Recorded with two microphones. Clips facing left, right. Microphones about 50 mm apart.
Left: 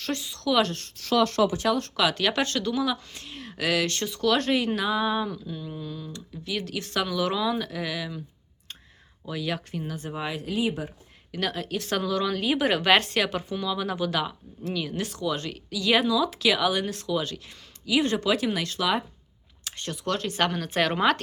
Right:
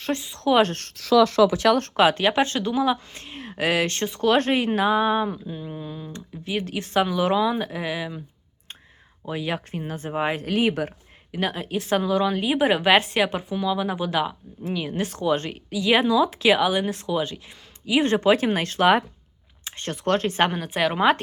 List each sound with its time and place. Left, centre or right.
0.0 s a woman's voice: right
0.7 s a woman's voice: right
1.7 s speech: right
2.0 s a woman's voice: right
9.2 s speech: right
10.4 s speech: right
11.3 s a woman's voice: right
19.6 s speech: right
20.6 s a woman's voice: centre